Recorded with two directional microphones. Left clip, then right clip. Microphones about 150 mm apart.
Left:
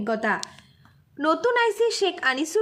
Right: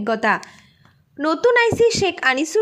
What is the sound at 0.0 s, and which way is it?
A woman's voice, 30° right (ahead or behind).